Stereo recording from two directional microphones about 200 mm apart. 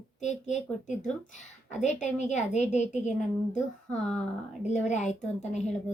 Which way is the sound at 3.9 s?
5° left (ahead or behind).